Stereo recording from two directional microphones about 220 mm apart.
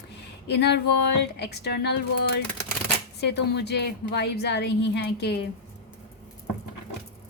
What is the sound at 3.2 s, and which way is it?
A woman's voice, 50° left (ahead or behind).